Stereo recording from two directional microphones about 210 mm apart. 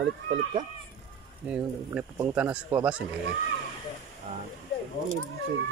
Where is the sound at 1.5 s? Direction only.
5° right (ahead or behind).